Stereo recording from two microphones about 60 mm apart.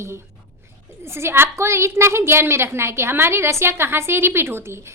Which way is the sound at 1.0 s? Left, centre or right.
Right.